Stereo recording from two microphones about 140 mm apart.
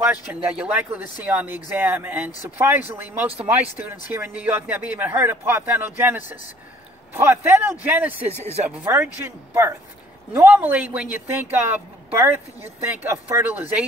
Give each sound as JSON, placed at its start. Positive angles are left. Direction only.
{"t": 0.0, "sound": "speech", "side_deg": -10}